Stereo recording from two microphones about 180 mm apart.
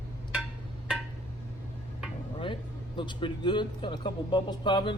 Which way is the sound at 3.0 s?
25° left (ahead or behind).